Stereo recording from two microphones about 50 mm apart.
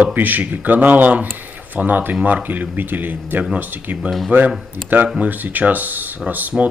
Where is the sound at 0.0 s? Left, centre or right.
Right.